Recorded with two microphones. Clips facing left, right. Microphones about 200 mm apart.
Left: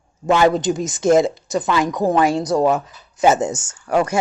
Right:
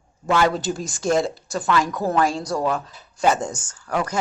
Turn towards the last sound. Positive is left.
turn(degrees=25)  # may be behind; listen again after turning